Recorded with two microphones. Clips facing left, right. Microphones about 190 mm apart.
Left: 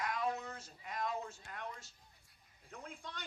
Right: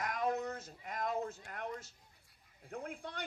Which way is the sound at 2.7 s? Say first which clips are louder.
Right 6 dB; 55° right (ahead or behind).